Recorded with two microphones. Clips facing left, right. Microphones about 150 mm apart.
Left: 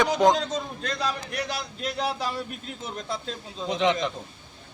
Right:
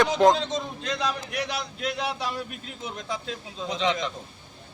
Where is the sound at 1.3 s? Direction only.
Centre (ahead or behind).